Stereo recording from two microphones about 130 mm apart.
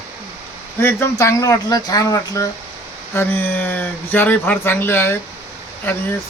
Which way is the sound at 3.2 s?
15° left (ahead or behind).